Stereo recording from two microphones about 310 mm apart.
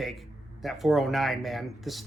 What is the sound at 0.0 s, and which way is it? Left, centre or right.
Speech, centre.